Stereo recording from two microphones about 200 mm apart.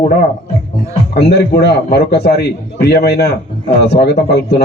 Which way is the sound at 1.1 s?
55° left (ahead or behind).